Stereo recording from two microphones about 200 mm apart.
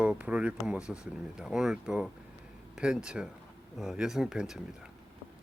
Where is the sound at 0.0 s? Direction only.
5° right (ahead or behind).